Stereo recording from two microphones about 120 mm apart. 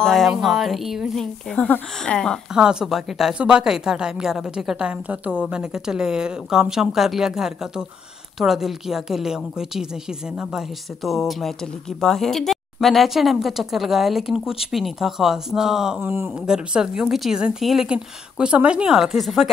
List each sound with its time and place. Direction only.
0.0 s speech: centre (ahead or behind)
2.5 s speech: 5° right (ahead or behind)
11.1 s speech: centre (ahead or behind)
16.0 s speech: 20° right (ahead or behind)
16.4 s speech: 5° right (ahead or behind)